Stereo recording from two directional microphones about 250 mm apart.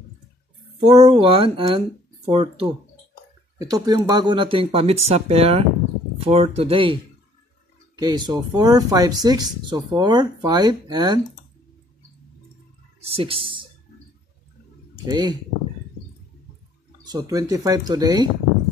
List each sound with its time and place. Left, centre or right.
0.7 s speech: right
13.1 s speech: right
15.0 s speech: centre
17.0 s speech: centre